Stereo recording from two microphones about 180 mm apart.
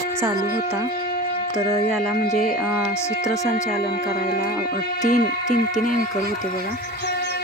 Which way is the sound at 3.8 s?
55° left (ahead or behind).